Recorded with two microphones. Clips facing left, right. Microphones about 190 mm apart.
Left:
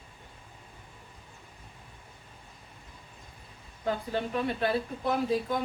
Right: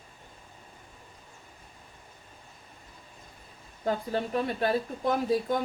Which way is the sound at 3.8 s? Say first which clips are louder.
Right 2 dB; 40° right (ahead or behind).